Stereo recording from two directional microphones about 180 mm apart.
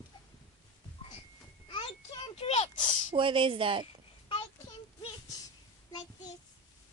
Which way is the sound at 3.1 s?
30° right (ahead or behind).